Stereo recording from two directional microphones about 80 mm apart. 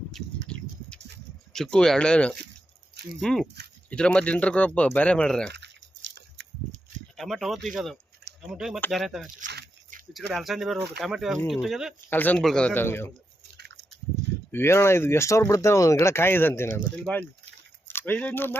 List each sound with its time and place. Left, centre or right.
0.1 s a sound: centre
1.5 s speech: centre
7.2 s speech: centre
12.1 s speech: left
12.4 s speech: centre
12.7 s speech: left
14.5 s speech: left